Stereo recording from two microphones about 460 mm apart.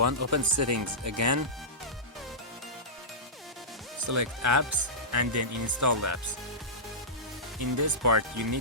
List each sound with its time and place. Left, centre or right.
0.0 s speech: right
4.0 s speech: right
7.6 s speech: right